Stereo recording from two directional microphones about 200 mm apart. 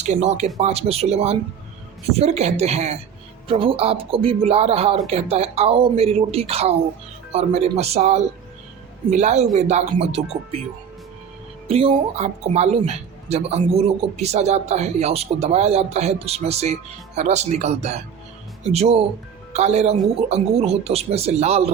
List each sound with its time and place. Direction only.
0.0 s speech: 35° right (ahead or behind)
11.7 s speech: 30° right (ahead or behind)